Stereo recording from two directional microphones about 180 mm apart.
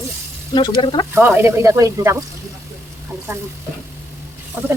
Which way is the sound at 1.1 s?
10° right (ahead or behind).